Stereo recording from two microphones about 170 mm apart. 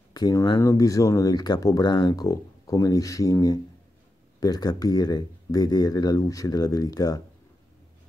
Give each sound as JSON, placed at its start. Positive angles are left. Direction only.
{"t": 0.1, "sound": "speech", "side_deg": 20}